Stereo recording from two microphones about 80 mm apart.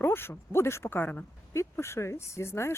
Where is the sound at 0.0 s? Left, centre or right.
Left.